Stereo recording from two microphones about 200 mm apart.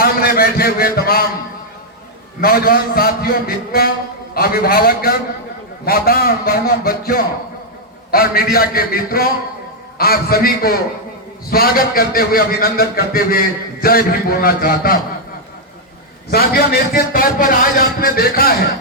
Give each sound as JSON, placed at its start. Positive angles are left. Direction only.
{"t": 0.0, "sound": "a man's voice", "side_deg": 50}
{"t": 2.4, "sound": "a man's voice", "side_deg": 50}
{"t": 16.3, "sound": "a man's voice", "side_deg": 50}